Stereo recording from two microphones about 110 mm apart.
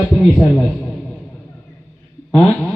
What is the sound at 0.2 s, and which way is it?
Speech, centre (ahead or behind).